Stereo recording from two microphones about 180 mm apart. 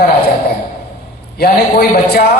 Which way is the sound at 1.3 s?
60° left (ahead or behind).